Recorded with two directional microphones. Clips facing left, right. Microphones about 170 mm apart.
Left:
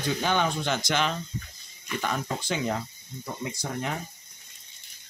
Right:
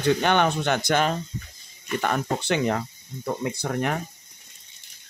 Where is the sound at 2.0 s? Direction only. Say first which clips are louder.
Right 5 dB; 60° right (ahead or behind).